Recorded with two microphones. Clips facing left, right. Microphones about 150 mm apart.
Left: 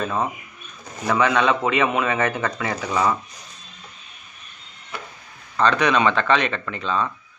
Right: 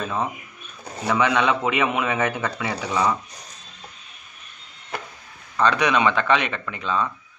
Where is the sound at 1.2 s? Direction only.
10° right (ahead or behind).